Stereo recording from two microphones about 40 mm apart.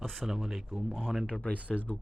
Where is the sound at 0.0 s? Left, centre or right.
Centre.